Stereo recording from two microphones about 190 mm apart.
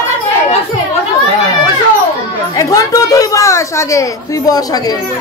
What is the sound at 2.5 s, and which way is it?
Speech, 15° left (ahead or behind).